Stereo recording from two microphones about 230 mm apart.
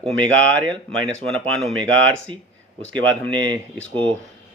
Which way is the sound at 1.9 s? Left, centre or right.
Right.